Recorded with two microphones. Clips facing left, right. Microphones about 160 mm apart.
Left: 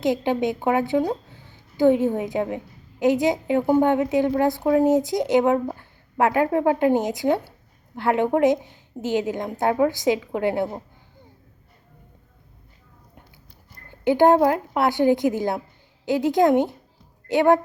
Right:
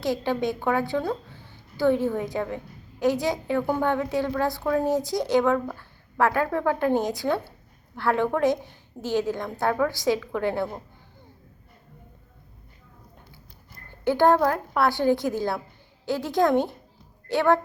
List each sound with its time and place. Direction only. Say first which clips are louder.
0.0 s a woman's voice: left 4 dB; 20° left (ahead or behind)
14.0 s speech: left 4 dB; 20° left (ahead or behind)